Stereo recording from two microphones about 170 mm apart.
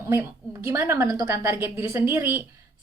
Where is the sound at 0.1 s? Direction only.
15° right (ahead or behind).